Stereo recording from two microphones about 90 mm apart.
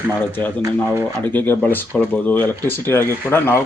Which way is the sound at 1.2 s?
20° left (ahead or behind).